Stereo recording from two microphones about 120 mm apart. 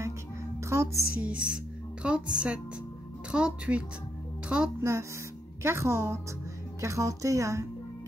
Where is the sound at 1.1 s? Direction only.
10° right (ahead or behind).